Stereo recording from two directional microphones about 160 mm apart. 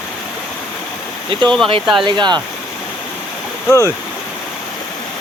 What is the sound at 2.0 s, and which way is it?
Speech, 25° right (ahead or behind).